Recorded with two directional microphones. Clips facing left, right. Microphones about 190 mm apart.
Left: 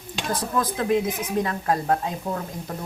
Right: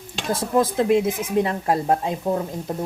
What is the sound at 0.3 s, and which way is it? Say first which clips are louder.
A woman's voice: right 7 dB; 25° right (ahead or behind).